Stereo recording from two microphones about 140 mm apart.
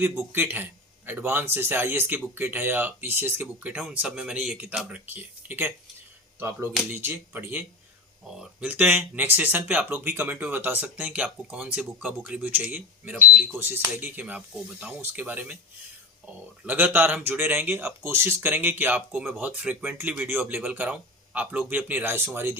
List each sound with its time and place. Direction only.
0.0 s speech: 15° right (ahead or behind)
16.6 s speech: 15° right (ahead or behind)